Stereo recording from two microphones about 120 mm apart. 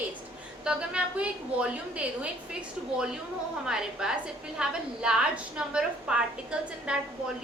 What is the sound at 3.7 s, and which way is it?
A woman's voice, 5° right (ahead or behind).